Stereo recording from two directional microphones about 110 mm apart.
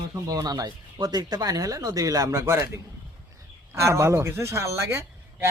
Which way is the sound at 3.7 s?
25° right (ahead or behind).